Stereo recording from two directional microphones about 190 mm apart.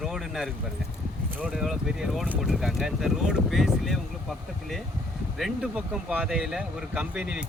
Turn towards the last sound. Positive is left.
turn(degrees=-5)  # may be behind; listen again after turning